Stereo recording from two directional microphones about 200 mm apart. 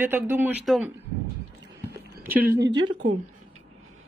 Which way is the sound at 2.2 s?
10° right (ahead or behind).